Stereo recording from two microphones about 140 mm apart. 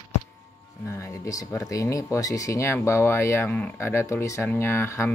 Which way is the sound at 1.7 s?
25° left (ahead or behind).